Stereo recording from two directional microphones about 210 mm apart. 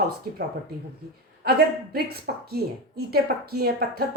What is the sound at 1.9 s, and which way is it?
A woman's voice, 50° right (ahead or behind).